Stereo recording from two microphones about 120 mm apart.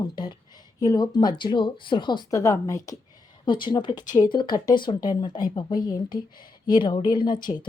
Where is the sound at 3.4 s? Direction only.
40° left (ahead or behind).